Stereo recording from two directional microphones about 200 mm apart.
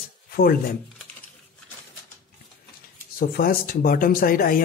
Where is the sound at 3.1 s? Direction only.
45° left (ahead or behind).